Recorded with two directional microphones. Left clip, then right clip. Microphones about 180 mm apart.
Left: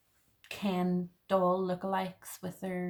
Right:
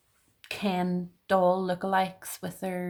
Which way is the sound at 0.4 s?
50° right (ahead or behind).